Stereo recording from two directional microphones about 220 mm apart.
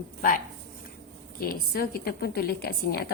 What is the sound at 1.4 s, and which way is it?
A woman's voice, 45° left (ahead or behind).